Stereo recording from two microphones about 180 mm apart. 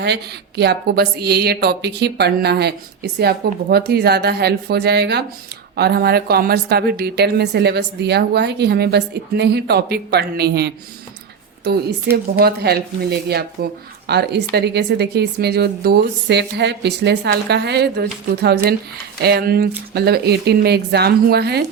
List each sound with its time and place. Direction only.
0.0 s a woman's voice: 70° right (ahead or behind)